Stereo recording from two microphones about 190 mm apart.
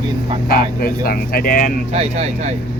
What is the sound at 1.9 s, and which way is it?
Speech, 35° right (ahead or behind).